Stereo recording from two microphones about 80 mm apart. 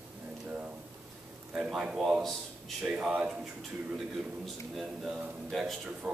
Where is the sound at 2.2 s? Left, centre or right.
Centre.